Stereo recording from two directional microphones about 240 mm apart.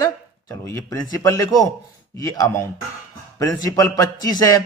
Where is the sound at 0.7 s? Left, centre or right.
Centre.